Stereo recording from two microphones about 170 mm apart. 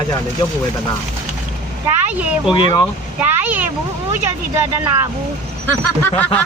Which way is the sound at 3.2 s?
10° right (ahead or behind).